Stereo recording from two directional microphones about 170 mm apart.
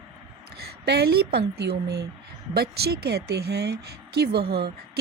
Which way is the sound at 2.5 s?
70° right (ahead or behind).